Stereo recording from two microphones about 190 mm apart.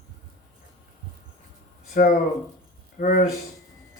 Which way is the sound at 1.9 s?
45° left (ahead or behind).